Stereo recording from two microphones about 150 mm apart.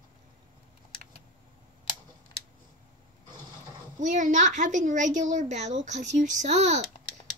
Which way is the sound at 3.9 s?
55° right (ahead or behind).